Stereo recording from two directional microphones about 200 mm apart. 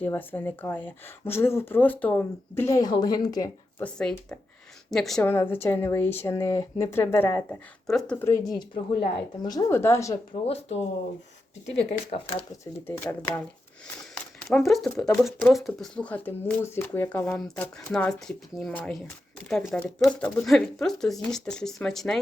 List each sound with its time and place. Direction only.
0.0 s speech: 10° left (ahead or behind)
10.4 s speech: 30° left (ahead or behind)
11.9 s speech: 30° left (ahead or behind)
13.0 s speech: 10° left (ahead or behind)
14.2 s a sound: centre (ahead or behind)
14.9 s speech: centre (ahead or behind)